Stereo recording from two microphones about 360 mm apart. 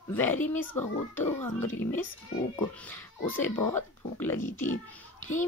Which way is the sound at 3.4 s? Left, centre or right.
Centre.